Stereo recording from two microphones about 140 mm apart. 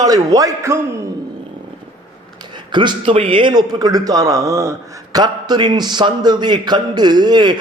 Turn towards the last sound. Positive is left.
turn(degrees=-30)  # may be behind; listen again after turning